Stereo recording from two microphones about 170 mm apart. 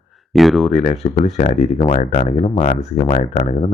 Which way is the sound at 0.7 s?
40° left (ahead or behind).